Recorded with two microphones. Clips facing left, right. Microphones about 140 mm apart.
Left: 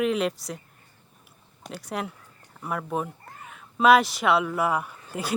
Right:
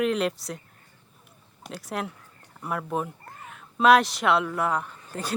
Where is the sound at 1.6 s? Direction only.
Centre (ahead or behind).